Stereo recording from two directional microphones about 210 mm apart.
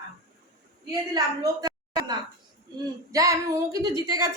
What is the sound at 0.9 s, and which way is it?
A woman's voice, 20° right (ahead or behind).